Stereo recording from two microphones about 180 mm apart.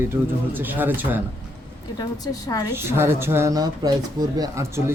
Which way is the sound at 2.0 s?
20° left (ahead or behind).